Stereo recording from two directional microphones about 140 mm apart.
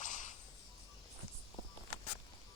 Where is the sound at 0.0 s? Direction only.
65° left (ahead or behind).